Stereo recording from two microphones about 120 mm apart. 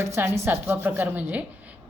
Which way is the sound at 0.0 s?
20° right (ahead or behind).